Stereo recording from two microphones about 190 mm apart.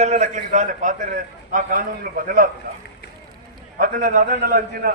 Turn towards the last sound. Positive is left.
turn(degrees=-50)  # may be behind; listen again after turning